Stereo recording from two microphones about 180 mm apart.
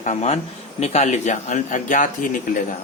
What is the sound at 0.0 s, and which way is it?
Speech, 40° left (ahead or behind).